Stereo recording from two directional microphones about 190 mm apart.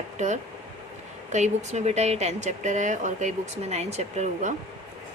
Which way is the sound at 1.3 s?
35° right (ahead or behind).